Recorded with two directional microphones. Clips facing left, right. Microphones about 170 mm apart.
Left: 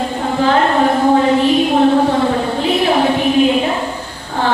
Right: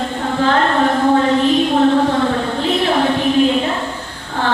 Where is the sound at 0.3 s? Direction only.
15° left (ahead or behind).